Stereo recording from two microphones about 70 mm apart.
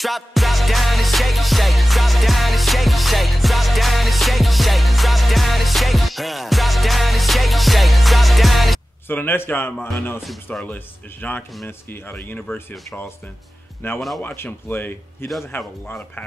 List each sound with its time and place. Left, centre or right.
0.0 s music: centre
9.0 s speech: left
13.9 s speech: centre
14.2 s speech: left